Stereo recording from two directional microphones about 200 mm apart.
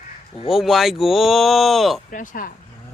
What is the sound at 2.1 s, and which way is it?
Speech, 40° left (ahead or behind).